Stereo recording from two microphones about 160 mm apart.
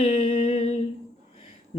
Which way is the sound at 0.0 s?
35° left (ahead or behind).